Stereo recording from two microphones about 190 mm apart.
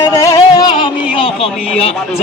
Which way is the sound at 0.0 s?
15° left (ahead or behind).